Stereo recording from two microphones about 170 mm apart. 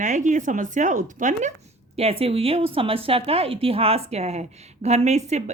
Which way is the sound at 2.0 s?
35° right (ahead or behind).